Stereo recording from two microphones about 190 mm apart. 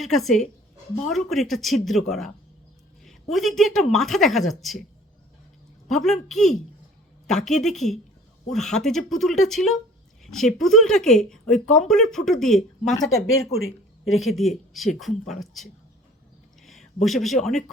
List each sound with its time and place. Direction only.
0.0 s speech: centre (ahead or behind)
5.9 s speech: centre (ahead or behind)
13.2 s speech: 90° left
14.2 s speech: centre (ahead or behind)
16.6 s speech: centre (ahead or behind)